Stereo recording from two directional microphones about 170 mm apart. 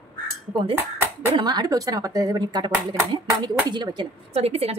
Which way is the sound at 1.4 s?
25° right (ahead or behind).